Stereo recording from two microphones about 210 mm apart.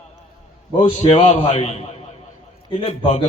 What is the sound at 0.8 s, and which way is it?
Speech, 20° left (ahead or behind).